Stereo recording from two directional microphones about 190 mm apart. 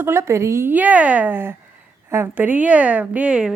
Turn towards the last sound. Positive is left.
turn(degrees=-5)  # may be behind; listen again after turning